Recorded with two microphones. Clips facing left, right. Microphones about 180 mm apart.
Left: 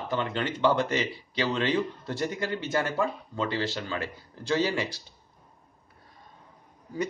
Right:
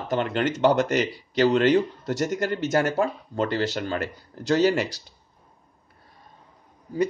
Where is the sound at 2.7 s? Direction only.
45° right (ahead or behind).